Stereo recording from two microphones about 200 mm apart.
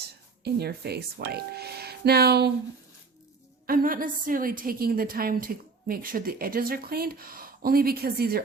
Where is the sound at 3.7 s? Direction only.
45° right (ahead or behind).